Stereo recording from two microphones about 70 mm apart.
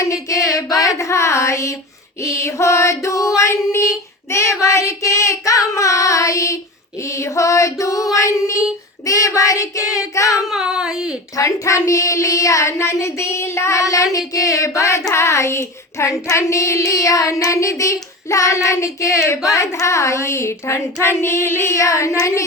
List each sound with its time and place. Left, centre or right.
0.0 s a sound: left
2.2 s child singing: left
7.0 s female singing: left
9.0 s child singing: left
10.4 s speech: centre
11.3 s child singing: left